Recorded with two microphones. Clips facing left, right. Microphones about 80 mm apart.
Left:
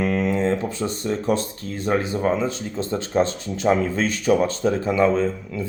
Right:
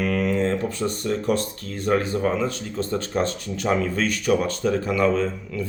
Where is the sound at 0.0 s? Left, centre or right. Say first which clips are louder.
Left 1 dB; left.